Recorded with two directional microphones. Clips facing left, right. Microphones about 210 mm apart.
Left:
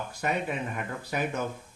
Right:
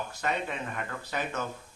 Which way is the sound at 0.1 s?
10° left (ahead or behind).